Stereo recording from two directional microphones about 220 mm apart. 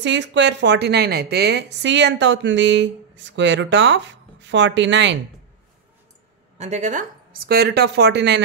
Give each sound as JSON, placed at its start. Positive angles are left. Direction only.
{"t": 0.0, "sound": "a woman's voice", "side_deg": -55}
{"t": 6.6, "sound": "a woman's voice", "side_deg": -30}